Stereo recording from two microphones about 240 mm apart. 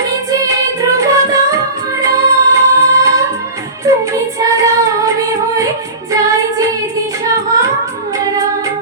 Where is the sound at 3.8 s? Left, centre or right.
Centre.